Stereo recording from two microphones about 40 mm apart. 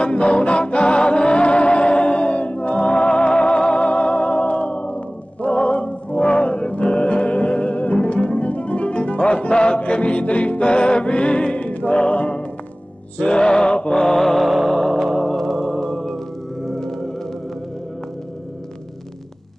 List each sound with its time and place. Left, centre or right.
0.0 s music: left
13.9 s mantra: centre
14.4 s music: centre